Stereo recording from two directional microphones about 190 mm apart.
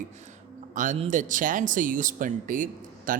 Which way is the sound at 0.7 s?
40° right (ahead or behind).